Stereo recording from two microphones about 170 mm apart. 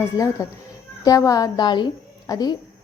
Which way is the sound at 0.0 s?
15° left (ahead or behind).